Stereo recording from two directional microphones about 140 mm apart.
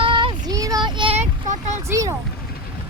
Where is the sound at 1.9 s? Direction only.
25° right (ahead or behind).